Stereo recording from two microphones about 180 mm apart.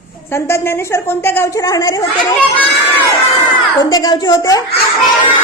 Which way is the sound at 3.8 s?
20° left (ahead or behind).